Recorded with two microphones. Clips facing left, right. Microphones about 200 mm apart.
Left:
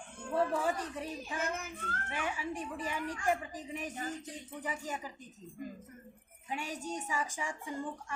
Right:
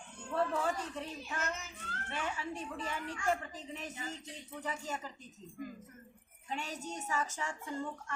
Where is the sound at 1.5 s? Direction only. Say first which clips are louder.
Left 6 dB; 55° left (ahead or behind).